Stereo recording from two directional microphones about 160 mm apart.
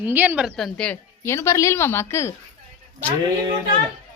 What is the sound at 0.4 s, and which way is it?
A woman's voice, centre (ahead or behind).